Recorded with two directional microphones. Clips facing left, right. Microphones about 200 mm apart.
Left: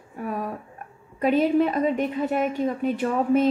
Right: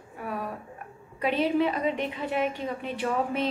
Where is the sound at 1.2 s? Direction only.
45° left (ahead or behind).